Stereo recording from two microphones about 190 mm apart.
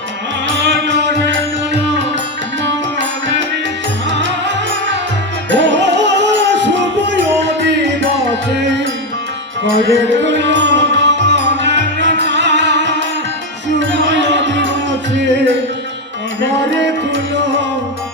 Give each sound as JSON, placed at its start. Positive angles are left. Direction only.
{"t": 0.4, "sound": "music", "side_deg": -70}
{"t": 2.6, "sound": "music", "side_deg": -70}
{"t": 16.6, "sound": "music", "side_deg": -70}